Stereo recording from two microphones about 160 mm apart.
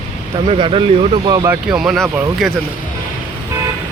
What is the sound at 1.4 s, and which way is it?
Speech, 5° right (ahead or behind).